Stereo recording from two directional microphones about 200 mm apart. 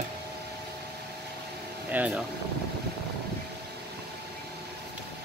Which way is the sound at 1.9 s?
5° right (ahead or behind).